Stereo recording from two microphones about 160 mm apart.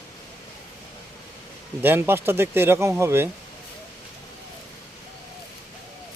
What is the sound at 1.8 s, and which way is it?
Speech, 15° right (ahead or behind).